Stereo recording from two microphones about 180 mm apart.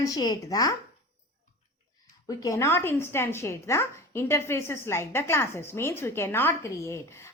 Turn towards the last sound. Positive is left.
turn(degrees=15)  # may be behind; listen again after turning